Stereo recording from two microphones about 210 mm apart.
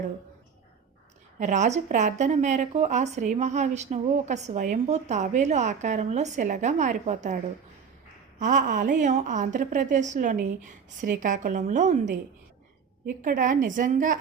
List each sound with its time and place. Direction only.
1.4 s a woman's voice: 35° right (ahead or behind)
8.4 s a woman's voice: 35° right (ahead or behind)
13.2 s a woman's voice: 40° right (ahead or behind)